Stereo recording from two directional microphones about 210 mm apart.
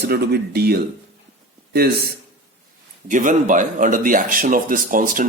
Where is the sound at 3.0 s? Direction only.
35° right (ahead or behind).